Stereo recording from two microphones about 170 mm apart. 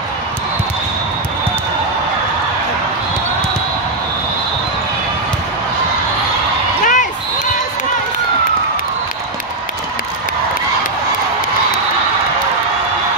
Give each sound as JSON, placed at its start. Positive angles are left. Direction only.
{"t": 6.8, "sound": "basketball bounce", "side_deg": 50}